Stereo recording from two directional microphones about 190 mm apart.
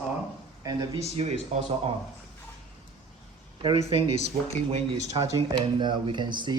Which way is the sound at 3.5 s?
25° right (ahead or behind).